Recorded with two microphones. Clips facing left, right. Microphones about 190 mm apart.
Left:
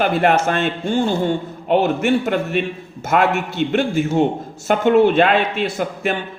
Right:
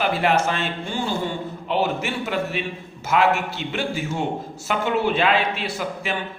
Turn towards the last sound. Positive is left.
turn(degrees=50)  # may be behind; listen again after turning